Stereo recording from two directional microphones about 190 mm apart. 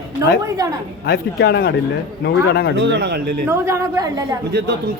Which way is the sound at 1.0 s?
60° left (ahead or behind).